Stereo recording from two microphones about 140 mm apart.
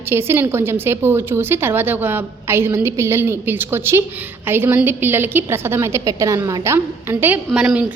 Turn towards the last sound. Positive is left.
turn(degrees=-10)  # may be behind; listen again after turning